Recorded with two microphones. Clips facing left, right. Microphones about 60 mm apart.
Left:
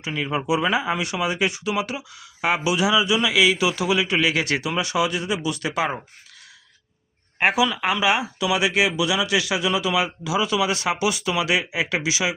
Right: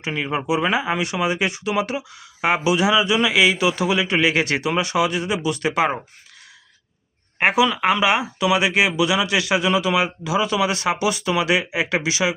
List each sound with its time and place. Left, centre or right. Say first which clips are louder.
0.0 s speech: right 1 dB; right
7.3 s speech: right 2 dB; right